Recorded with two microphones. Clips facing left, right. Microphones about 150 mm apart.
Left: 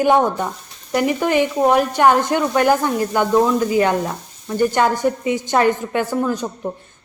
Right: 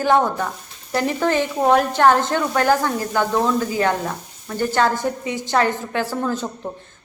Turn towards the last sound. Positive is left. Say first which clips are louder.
# left 3 dB
turn(degrees=15)  # may be behind; listen again after turning